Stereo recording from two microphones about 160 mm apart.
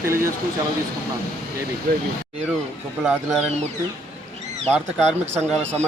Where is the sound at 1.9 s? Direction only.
75° right (ahead or behind).